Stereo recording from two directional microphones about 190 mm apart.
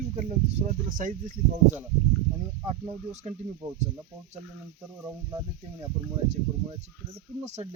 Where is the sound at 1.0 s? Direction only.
40° right (ahead or behind).